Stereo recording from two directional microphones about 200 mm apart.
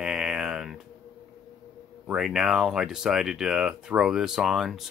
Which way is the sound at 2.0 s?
5° right (ahead or behind).